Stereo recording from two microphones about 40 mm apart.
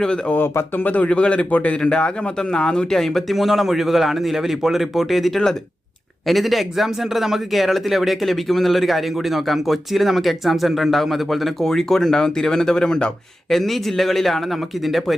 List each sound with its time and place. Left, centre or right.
0.3 s speech: left
0.8 s a man's voice: left
1.8 s a man's voice: left
2.9 s a man's voice: centre
13.5 s a man's voice: centre